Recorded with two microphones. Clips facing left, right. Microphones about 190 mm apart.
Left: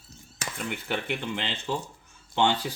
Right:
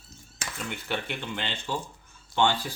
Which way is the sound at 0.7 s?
10° left (ahead or behind).